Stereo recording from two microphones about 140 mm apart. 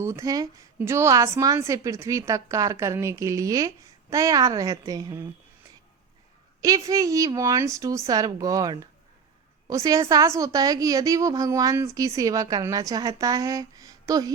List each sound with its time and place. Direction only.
0.0 s a woman's voice: 20° right (ahead or behind)
6.6 s a woman's voice: 25° right (ahead or behind)